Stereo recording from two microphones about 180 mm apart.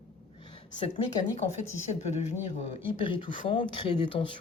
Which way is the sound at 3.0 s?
30° left (ahead or behind).